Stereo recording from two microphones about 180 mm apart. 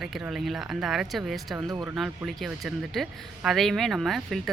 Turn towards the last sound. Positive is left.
turn(degrees=0)  # may be behind; listen again after turning